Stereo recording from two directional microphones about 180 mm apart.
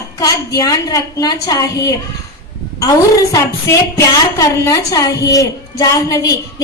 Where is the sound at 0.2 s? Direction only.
20° left (ahead or behind).